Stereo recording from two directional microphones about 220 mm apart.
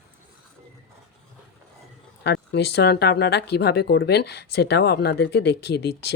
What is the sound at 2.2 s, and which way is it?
Speech, 50° left (ahead or behind).